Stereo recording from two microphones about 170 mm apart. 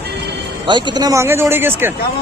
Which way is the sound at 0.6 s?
25° right (ahead or behind).